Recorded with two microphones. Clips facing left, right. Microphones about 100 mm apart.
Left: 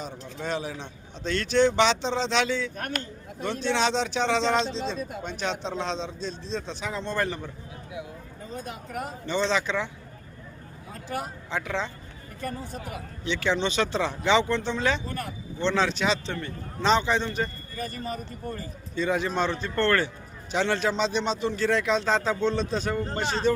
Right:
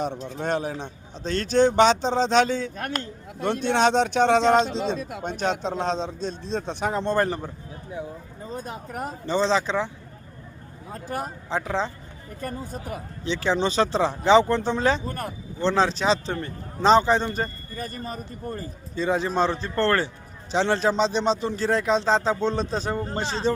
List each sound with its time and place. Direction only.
0.3 s a man's voice: 50° right (ahead or behind)
4.9 s speech: 85° right
5.2 s a man's voice: 45° right (ahead or behind)
8.5 s a sound: 35° right (ahead or behind)
10.9 s speech: 40° right (ahead or behind)